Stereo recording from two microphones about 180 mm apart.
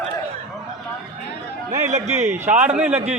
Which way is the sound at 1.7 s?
40° right (ahead or behind).